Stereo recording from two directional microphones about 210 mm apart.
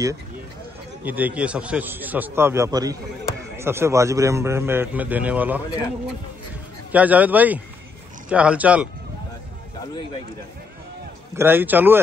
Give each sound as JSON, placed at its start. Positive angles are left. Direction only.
{"t": 1.0, "sound": "a man's voice", "side_deg": -5}
{"t": 6.9, "sound": "a man's voice", "side_deg": -5}
{"t": 11.3, "sound": "a man's voice", "side_deg": -10}